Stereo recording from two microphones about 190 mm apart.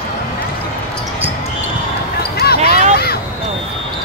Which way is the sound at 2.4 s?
55° left (ahead or behind).